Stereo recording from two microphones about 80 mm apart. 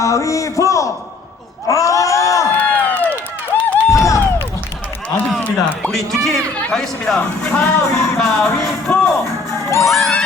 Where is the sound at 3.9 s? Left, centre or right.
Left.